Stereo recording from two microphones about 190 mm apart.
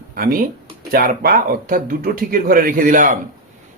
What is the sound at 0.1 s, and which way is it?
Speech, 50° right (ahead or behind).